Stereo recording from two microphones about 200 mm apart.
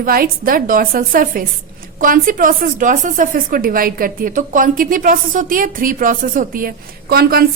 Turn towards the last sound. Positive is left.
turn(degrees=-50)  # may be behind; listen again after turning